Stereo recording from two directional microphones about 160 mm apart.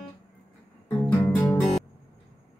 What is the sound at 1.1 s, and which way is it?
Music, 5° left (ahead or behind).